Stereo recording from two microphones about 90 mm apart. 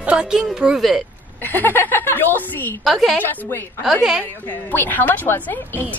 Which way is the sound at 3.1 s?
25° left (ahead or behind).